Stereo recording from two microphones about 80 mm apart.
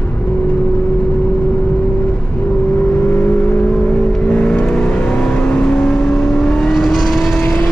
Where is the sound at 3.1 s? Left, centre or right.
Centre.